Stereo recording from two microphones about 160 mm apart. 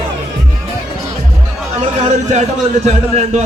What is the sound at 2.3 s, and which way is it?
A man's voice, 45° right (ahead or behind).